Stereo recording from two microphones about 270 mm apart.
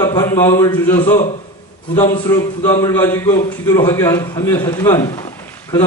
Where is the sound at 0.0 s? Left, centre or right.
Centre.